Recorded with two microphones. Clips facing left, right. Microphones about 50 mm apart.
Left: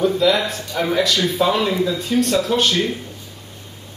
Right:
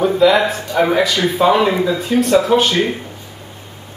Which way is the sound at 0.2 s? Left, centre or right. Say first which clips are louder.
Right 5 dB; centre.